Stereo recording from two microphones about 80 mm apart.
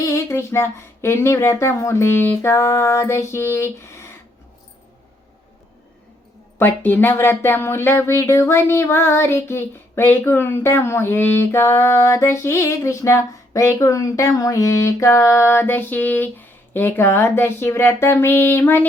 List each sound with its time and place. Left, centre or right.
0.0 s speech: left
6.6 s speech: left